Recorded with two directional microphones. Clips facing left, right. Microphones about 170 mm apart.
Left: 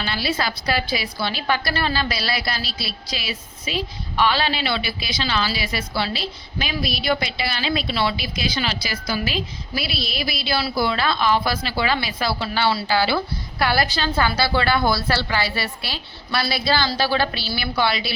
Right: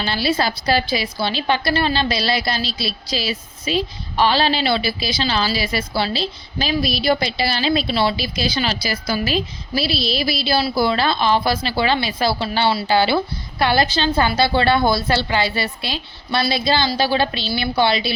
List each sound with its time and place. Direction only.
0.0 s a woman's voice: 30° right (ahead or behind)